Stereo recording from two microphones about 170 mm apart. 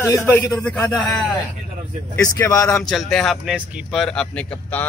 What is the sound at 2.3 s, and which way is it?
Speech, 20° left (ahead or behind).